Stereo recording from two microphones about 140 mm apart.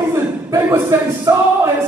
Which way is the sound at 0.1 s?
20° right (ahead or behind).